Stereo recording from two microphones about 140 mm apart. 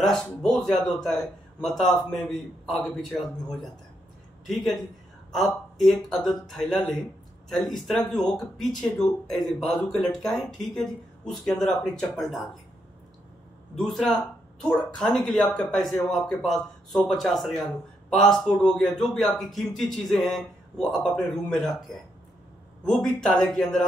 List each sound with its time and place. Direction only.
0.0 s a man's voice: 5° left (ahead or behind)
4.5 s a man's voice: centre (ahead or behind)
13.7 s a man's voice: centre (ahead or behind)